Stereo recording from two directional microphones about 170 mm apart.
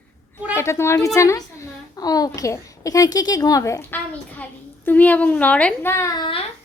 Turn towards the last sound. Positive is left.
turn(degrees=25)  # may be behind; listen again after turning